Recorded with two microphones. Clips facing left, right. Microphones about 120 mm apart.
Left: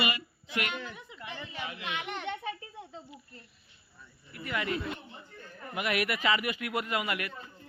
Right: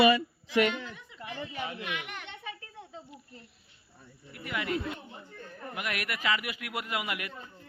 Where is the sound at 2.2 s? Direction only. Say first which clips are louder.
Left 10 dB; 50° left (ahead or behind).